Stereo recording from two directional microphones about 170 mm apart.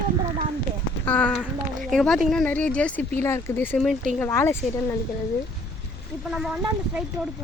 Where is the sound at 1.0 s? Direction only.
10° left (ahead or behind).